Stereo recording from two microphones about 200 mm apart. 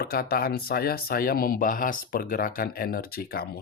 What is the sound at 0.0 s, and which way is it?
Speech, 50° left (ahead or behind).